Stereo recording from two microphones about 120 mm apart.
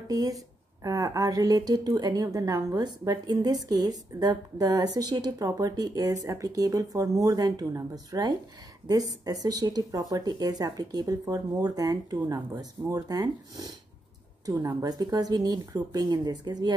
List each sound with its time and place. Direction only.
0.1 s a woman's voice: 30° right (ahead or behind)